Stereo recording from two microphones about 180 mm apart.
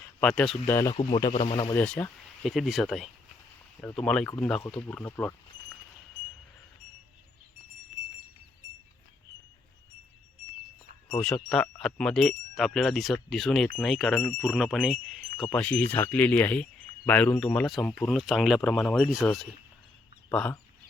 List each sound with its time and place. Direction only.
0.2 s speech: 5° left (ahead or behind)
0.9 s speech: 30° left (ahead or behind)
1.7 s speech: 10° left (ahead or behind)
11.2 s speech: 5° left (ahead or behind)
20.3 s speech: 5° left (ahead or behind)